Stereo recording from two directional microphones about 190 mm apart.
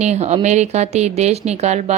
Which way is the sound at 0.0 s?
35° right (ahead or behind).